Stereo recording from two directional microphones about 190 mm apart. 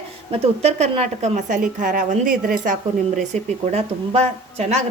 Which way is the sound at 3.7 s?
35° right (ahead or behind).